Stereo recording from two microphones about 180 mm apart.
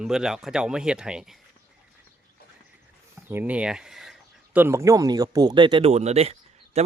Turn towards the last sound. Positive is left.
turn(degrees=-35)  # may be behind; listen again after turning